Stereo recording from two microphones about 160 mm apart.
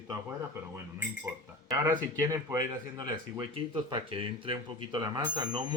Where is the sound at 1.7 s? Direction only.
20° right (ahead or behind).